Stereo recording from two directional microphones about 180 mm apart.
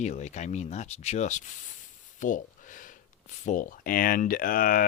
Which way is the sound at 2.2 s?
45° left (ahead or behind).